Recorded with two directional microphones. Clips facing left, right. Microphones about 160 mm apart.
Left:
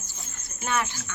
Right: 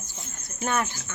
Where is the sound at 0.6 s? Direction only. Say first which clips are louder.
Right 1 dB; 45° right (ahead or behind).